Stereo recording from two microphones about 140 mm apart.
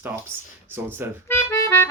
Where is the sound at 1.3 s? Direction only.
20° left (ahead or behind).